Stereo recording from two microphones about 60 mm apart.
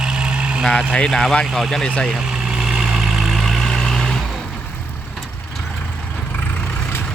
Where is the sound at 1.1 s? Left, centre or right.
Centre.